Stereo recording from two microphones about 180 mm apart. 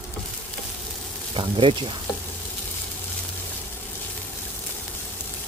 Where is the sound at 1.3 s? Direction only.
30° right (ahead or behind).